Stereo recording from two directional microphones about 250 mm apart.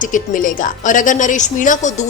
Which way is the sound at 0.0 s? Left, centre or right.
Left.